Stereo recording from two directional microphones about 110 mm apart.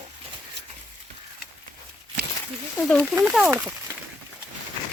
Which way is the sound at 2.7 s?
5° left (ahead or behind).